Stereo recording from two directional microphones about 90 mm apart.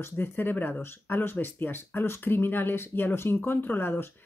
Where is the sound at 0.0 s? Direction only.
20° left (ahead or behind).